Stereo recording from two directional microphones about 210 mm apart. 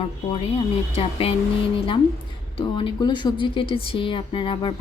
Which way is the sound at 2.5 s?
25° left (ahead or behind).